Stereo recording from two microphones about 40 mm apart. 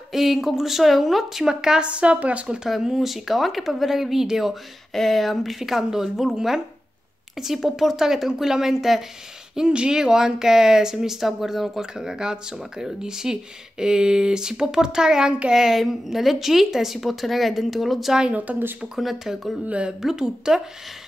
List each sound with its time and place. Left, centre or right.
0.1 s speech: centre
1.5 s speech: centre
1.9 s speech: right
2.8 s speech: centre
4.9 s speech: centre
7.3 s speech: centre
9.6 s speech: right; by 18.1 s centre
18.5 s speech: right
18.9 s speech: centre
19.6 s speech: right
20.0 s speech: centre